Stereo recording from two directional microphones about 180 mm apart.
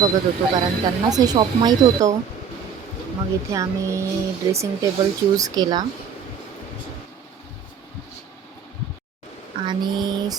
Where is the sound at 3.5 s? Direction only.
15° right (ahead or behind).